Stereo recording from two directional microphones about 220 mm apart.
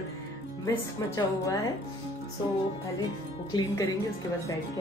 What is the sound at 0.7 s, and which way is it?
A woman's voice, 15° left (ahead or behind).